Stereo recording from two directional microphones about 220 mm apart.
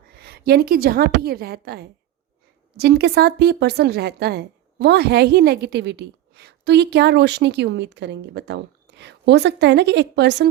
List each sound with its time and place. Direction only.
0.1 s a woman's voice: 45° right (ahead or behind)